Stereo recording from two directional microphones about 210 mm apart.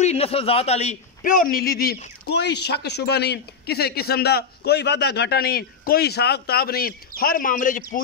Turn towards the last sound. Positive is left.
turn(degrees=40)  # may be behind; listen again after turning